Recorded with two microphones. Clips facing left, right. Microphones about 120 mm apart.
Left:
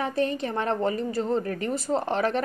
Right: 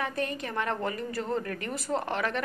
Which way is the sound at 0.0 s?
30° left (ahead or behind).